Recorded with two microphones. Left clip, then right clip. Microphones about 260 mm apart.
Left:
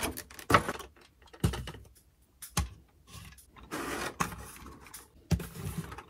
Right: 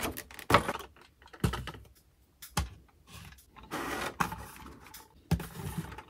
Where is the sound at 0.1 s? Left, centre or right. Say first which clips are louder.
Even; right.